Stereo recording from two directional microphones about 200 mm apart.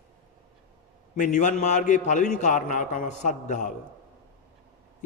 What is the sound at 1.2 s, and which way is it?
A man's voice, 40° left (ahead or behind).